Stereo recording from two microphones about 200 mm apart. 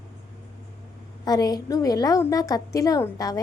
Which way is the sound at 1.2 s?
20° left (ahead or behind).